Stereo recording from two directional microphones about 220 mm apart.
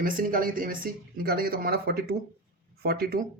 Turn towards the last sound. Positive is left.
turn(degrees=-45)  # may be behind; listen again after turning